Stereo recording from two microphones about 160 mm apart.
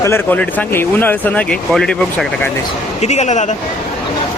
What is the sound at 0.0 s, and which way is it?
Speech, 15° left (ahead or behind).